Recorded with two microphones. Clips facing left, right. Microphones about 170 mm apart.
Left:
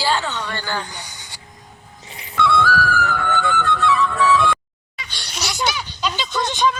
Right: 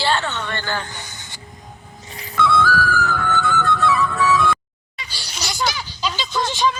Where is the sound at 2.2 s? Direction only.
40° right (ahead or behind).